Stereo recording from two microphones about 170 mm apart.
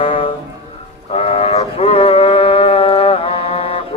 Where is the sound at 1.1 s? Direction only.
35° left (ahead or behind).